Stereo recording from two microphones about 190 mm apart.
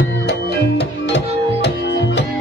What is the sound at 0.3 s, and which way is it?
Music, 65° left (ahead or behind).